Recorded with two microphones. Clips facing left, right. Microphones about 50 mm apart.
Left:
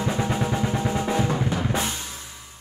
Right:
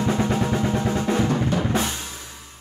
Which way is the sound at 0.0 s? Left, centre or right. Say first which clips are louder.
Right 3 dB; centre.